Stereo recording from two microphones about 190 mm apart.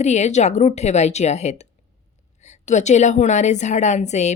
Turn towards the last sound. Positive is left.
turn(degrees=35)  # may be behind; listen again after turning